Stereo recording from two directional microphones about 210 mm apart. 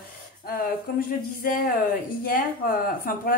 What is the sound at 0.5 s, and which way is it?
A woman's voice, 45° left (ahead or behind).